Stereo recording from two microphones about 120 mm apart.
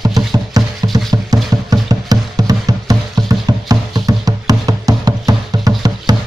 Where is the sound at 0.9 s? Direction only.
30° right (ahead or behind).